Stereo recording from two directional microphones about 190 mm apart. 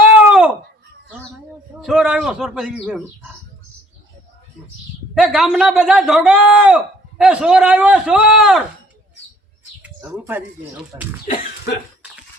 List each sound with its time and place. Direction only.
0.1 s a sound: 5° right (ahead or behind)
1.8 s a man's voice: centre (ahead or behind)
5.1 s a man's voice: centre (ahead or behind)
9.8 s speech: 10° right (ahead or behind)
11.3 s cough: 55° left (ahead or behind)